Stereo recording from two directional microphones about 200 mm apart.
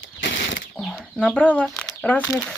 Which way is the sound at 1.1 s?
5° left (ahead or behind).